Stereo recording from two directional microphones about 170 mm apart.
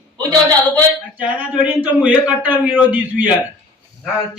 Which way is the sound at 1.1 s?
5° right (ahead or behind).